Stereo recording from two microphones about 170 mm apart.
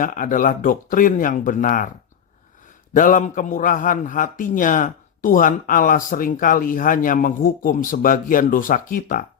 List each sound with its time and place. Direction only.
0.0 s a man's voice: 50° left (ahead or behind)
2.9 s a man's voice: 50° left (ahead or behind)